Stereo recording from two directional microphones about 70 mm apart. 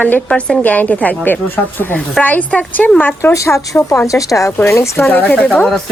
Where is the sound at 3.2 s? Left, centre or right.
Left.